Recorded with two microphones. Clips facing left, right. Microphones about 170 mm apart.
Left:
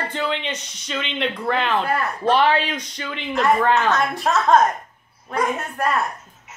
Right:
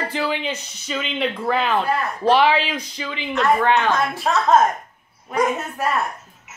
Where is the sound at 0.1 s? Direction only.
5° right (ahead or behind).